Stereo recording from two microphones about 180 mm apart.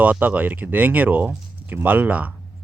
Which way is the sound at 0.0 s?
10° right (ahead or behind).